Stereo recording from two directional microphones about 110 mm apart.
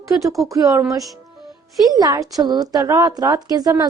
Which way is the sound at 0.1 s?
30° right (ahead or behind).